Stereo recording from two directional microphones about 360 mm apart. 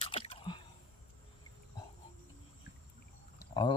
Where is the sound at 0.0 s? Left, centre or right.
Centre.